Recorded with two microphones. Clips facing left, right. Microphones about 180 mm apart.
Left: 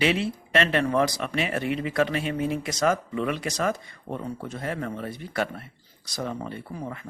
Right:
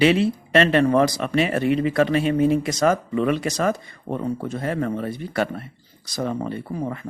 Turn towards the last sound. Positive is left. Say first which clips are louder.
# right 7 dB
turn(degrees=-45)  # may be behind; listen again after turning